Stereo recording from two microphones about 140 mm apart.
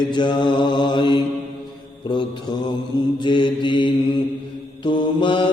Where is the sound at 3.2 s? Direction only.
35° left (ahead or behind).